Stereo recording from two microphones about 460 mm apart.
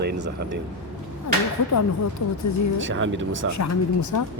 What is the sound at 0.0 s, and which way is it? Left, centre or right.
Speech, right.